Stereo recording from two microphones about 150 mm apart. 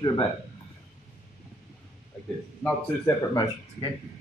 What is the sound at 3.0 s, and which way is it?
Speech, 25° left (ahead or behind).